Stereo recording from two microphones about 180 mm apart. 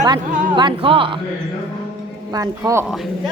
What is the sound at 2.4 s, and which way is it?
Music, 20° right (ahead or behind).